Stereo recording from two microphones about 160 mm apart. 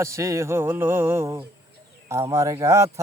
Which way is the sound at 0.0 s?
20° right (ahead or behind).